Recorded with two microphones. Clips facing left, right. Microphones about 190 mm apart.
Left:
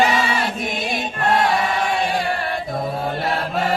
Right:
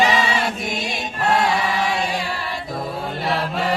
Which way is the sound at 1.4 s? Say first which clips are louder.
Left 1 dB; 55° left (ahead or behind).